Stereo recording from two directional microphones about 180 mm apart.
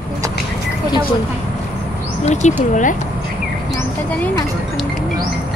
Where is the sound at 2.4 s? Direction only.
40° left (ahead or behind).